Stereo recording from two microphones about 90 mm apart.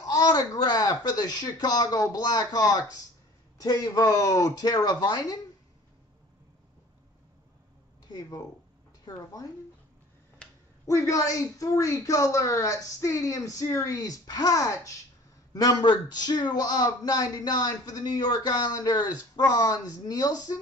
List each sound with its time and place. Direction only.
0.0 s speech: 45° left (ahead or behind)
8.1 s a woman's voice: 40° left (ahead or behind)
10.4 s a sound: 10° left (ahead or behind)
10.9 s a woman's voice: 35° left (ahead or behind)
15.8 s speech: 55° left (ahead or behind)